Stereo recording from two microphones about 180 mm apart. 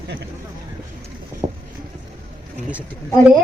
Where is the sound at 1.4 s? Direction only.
15° right (ahead or behind).